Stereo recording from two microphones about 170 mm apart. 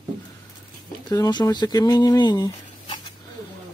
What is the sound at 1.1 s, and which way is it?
Speech, 20° left (ahead or behind).